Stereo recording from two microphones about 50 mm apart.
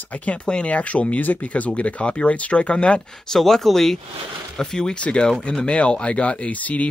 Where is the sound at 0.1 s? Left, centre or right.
Left.